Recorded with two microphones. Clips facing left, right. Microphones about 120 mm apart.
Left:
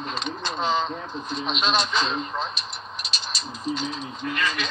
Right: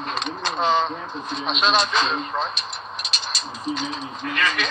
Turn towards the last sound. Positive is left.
turn(degrees=-75)  # may be behind; listen again after turning